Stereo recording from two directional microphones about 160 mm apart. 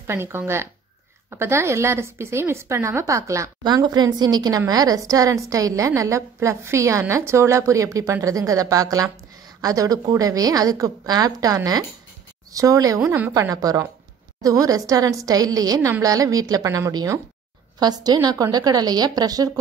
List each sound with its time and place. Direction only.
0.0 s a woman's voice: 15° right (ahead or behind)